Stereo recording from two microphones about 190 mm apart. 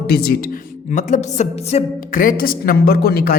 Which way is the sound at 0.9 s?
40° left (ahead or behind).